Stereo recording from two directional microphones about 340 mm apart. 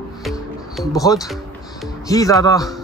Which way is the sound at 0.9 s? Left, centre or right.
Centre.